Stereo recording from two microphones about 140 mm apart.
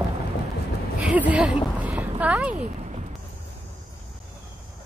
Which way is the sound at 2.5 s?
55° right (ahead or behind).